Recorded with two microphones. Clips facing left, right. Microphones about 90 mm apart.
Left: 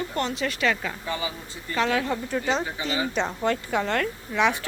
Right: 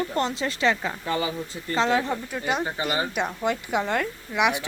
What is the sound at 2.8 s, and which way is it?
Speech, 35° right (ahead or behind).